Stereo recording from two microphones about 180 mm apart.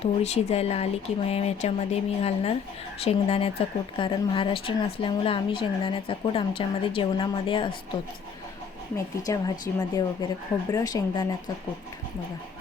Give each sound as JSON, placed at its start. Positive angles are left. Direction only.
{"t": 0.0, "sound": "a woman's voice", "side_deg": 35}
{"t": 9.2, "sound": "a woman's voice", "side_deg": 20}